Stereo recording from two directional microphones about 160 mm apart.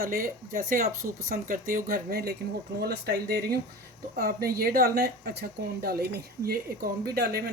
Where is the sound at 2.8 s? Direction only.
85° right.